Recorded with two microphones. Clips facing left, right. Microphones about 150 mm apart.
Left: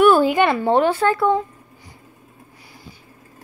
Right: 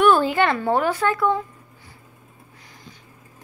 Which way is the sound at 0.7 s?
30° left (ahead or behind).